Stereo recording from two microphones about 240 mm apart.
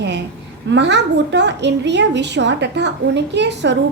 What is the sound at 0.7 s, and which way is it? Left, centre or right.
A woman's voice, right.